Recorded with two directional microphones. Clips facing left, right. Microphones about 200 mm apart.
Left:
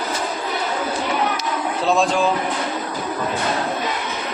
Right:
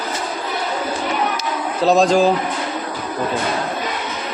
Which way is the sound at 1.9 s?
40° right (ahead or behind).